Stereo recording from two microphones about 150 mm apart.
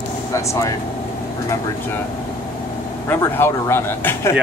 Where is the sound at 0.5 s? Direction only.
20° left (ahead or behind).